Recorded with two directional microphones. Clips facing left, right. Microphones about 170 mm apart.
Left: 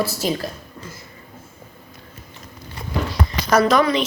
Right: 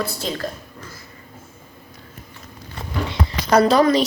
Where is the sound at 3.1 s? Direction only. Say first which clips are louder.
Right 1 dB; 30° right (ahead or behind).